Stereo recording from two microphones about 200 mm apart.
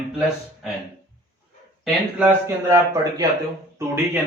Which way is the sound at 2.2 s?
15° right (ahead or behind).